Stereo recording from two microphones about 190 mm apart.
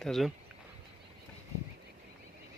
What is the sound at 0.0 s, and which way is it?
Speech, centre (ahead or behind).